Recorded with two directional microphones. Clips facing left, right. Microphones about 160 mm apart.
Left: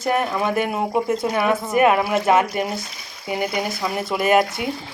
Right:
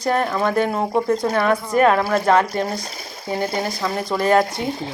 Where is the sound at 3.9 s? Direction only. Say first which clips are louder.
Right 1 dB; 5° left (ahead or behind).